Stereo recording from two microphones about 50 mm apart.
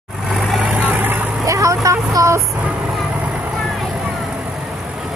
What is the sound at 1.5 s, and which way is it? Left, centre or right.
Vehicle, right.